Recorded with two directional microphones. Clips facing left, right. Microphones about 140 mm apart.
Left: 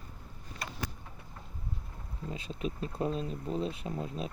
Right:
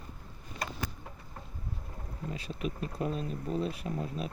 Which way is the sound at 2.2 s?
25° left (ahead or behind).